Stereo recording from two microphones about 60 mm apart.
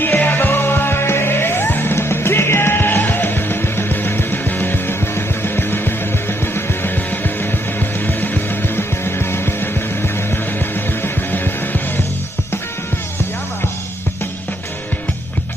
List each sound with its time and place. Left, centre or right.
0.2 s music: left